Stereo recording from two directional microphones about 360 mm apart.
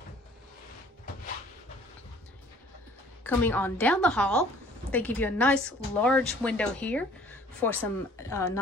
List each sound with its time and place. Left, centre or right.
3.3 s a woman's voice: centre